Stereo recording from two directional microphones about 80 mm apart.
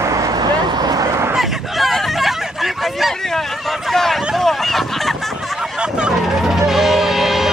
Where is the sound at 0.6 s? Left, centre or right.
Right.